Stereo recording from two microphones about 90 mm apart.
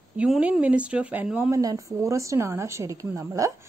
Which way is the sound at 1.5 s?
35° right (ahead or behind).